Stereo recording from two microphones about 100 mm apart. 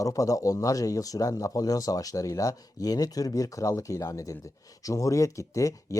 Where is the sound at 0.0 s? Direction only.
35° left (ahead or behind).